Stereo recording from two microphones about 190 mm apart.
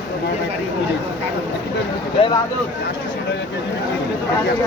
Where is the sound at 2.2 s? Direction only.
30° left (ahead or behind).